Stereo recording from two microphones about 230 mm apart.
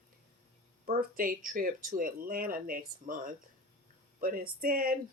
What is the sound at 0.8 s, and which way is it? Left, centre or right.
Speech, right.